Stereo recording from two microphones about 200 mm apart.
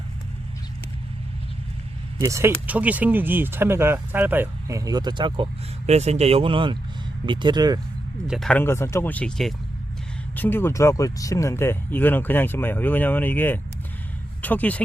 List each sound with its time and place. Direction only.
2.1 s speech: 15° right (ahead or behind)
8.3 s speech: 5° left (ahead or behind)